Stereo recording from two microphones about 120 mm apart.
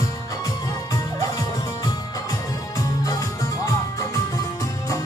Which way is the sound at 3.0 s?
30° left (ahead or behind).